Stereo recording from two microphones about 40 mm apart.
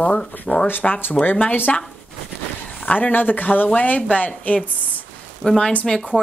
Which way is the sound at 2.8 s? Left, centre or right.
Left.